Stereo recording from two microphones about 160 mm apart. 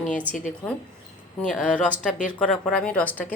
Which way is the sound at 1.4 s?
5° left (ahead or behind).